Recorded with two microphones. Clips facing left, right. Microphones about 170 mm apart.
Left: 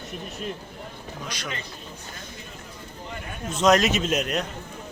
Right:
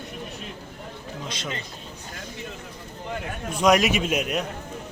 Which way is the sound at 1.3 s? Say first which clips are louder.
Right 1 dB; 25° right (ahead or behind).